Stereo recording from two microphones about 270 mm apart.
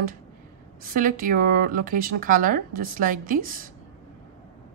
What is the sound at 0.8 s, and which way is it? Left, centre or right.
Speech, right.